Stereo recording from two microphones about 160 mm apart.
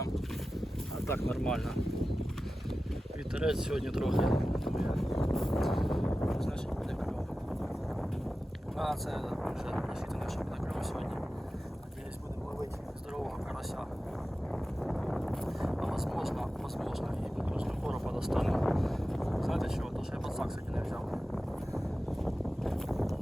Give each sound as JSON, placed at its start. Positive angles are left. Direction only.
{"t": 1.3, "sound": "speech", "side_deg": 5}
{"t": 3.3, "sound": "speech", "side_deg": -5}
{"t": 8.8, "sound": "speech", "side_deg": 0}
{"t": 14.5, "sound": "a sound", "side_deg": 0}
{"t": 20.2, "sound": "speech", "side_deg": -5}
{"t": 22.2, "sound": "a sound", "side_deg": 0}